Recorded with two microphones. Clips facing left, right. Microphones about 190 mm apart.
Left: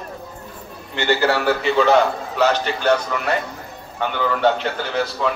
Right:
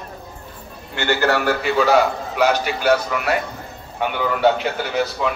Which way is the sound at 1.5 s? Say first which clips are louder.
Left 3 dB; 5° right (ahead or behind).